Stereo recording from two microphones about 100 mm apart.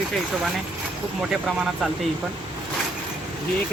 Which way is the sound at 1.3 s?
5° right (ahead or behind).